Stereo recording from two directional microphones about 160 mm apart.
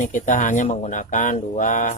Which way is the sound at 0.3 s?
50° left (ahead or behind).